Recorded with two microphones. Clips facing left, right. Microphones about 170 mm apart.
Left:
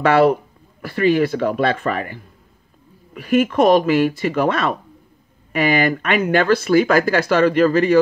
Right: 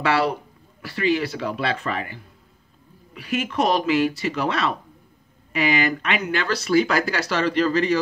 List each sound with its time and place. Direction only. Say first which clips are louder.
0.0 s speech: left 8 dB; 50° left (ahead or behind)
3.2 s speech: left 8 dB; 50° left (ahead or behind)